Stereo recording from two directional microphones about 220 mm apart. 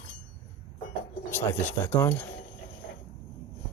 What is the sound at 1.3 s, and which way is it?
Speech, 10° left (ahead or behind).